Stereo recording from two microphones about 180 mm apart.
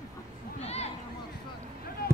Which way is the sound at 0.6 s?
35° left (ahead or behind).